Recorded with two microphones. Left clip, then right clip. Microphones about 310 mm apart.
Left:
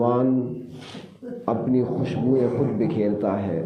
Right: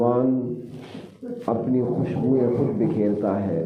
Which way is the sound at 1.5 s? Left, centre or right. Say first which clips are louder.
Even; left.